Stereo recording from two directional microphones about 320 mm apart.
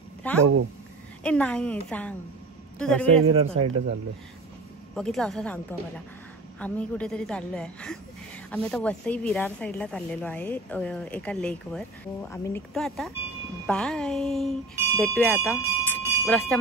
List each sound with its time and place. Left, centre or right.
0.2 s a woman's voice: centre
3.3 s speech: centre
4.9 s a woman's voice: centre
16.0 s a sound: centre